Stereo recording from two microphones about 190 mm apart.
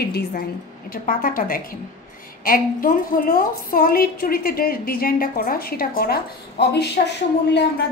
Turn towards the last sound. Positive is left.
turn(degrees=65)  # may be behind; listen again after turning